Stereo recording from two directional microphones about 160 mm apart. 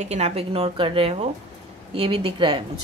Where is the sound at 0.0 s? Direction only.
45° right (ahead or behind).